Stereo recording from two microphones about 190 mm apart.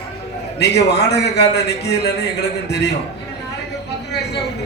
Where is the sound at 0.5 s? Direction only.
60° left (ahead or behind).